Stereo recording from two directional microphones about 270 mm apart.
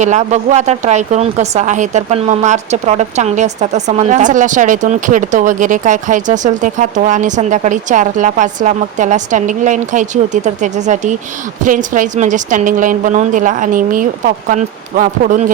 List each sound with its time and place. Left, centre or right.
0.0 s speech: right